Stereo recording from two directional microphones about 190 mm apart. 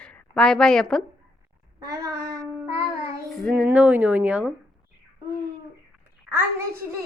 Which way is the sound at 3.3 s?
Centre (ahead or behind).